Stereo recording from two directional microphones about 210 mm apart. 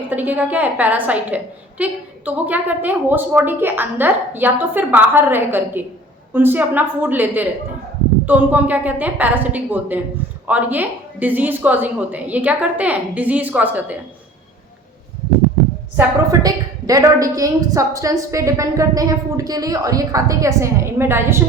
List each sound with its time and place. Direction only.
0.1 s a woman's voice: 10° right (ahead or behind)
16.0 s a woman's voice: 15° right (ahead or behind)